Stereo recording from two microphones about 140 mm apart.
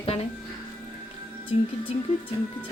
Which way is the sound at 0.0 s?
45° left (ahead or behind).